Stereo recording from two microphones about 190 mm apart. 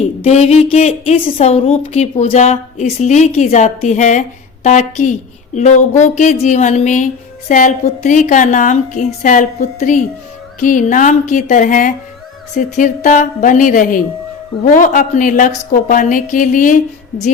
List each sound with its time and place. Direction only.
0.3 s a woman's voice: 35° left (ahead or behind)